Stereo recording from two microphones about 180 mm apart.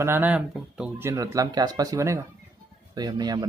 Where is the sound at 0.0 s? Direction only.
10° right (ahead or behind).